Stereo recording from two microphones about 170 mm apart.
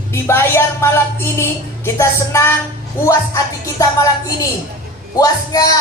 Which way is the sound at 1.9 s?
15° left (ahead or behind).